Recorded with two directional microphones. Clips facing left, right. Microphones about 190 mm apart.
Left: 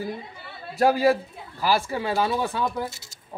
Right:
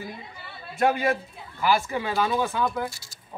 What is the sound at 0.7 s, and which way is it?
Speech, 35° left (ahead or behind).